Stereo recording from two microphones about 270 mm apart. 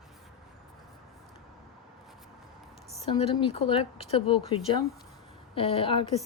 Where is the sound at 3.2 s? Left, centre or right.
Left.